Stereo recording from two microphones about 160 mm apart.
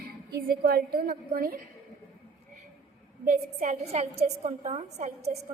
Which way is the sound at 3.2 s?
45° right (ahead or behind).